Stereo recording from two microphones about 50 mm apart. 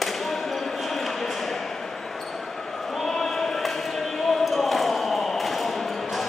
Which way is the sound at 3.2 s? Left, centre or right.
Centre.